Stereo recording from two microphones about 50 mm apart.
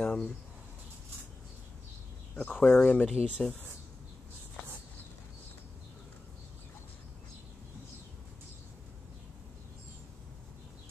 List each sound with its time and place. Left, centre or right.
0.0 s speech: left
2.5 s speech: centre